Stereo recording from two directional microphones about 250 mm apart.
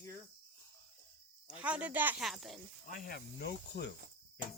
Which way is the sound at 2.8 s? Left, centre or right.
Left.